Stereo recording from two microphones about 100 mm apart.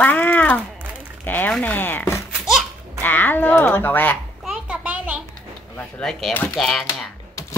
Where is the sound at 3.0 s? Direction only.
20° left (ahead or behind).